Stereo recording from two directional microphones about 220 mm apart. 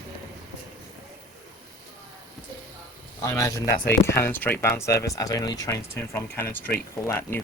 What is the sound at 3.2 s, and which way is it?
Speech, 15° left (ahead or behind).